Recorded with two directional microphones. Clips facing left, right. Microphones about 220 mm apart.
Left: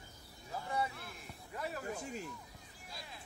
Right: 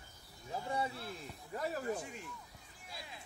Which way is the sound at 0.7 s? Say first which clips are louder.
Even; 30° right (ahead or behind).